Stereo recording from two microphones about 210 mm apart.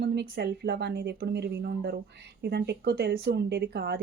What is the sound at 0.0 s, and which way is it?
Speech, 55° right (ahead or behind).